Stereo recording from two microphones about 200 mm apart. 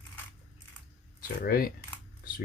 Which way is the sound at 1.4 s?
50° left (ahead or behind).